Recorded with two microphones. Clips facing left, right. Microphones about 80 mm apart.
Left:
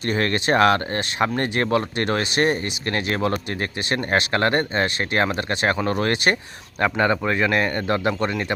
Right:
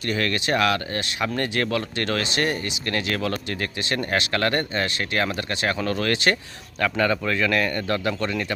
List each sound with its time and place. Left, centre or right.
0.1 s speech: left